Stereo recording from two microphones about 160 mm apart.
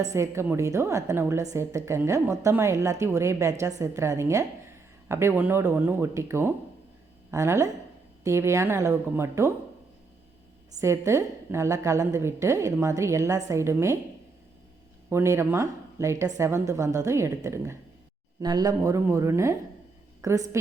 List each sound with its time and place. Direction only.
0.0 s a woman's voice: 20° right (ahead or behind)
10.8 s a woman's voice: 20° right (ahead or behind)
15.1 s a woman's voice: 15° right (ahead or behind)